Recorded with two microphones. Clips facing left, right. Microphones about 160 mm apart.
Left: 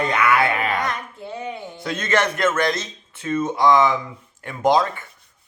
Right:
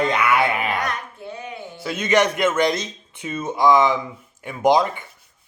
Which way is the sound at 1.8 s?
10° right (ahead or behind).